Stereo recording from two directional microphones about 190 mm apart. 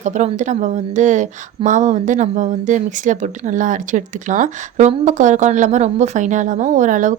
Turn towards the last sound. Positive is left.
turn(degrees=-40)  # may be behind; listen again after turning